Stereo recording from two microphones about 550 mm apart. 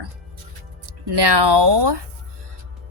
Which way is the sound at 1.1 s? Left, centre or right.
Right.